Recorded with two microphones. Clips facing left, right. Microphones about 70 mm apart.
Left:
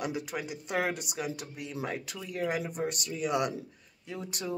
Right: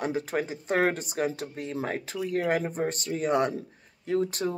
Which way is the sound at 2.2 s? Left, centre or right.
Right.